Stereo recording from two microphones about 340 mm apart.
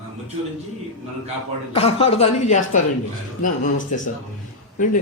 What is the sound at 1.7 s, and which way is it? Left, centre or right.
Speech, centre.